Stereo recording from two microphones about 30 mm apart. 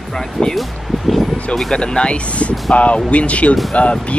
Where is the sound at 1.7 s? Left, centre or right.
Left.